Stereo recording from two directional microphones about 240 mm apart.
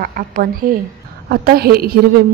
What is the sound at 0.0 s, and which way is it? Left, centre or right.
A woman's voice, right.